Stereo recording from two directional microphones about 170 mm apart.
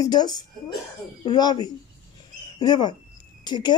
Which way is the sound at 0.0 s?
25° left (ahead or behind).